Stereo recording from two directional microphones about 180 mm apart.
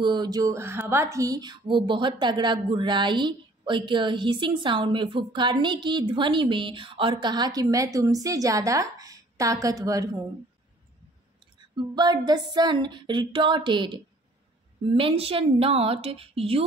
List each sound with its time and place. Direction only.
0.0 s a woman's voice: 25° right (ahead or behind)
11.9 s a woman's voice: 25° right (ahead or behind)